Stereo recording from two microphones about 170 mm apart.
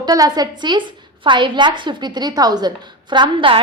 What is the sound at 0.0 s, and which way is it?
A woman's voice, 20° right (ahead or behind).